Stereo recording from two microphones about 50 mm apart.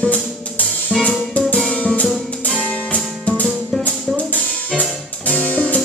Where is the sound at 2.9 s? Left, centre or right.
Left.